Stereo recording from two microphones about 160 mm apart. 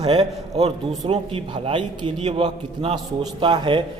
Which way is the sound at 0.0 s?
30° right (ahead or behind).